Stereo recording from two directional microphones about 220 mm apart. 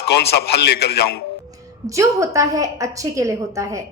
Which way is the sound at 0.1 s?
45° left (ahead or behind).